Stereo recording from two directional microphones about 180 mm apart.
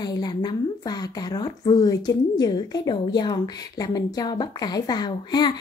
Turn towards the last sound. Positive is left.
turn(degrees=25)  # may be behind; listen again after turning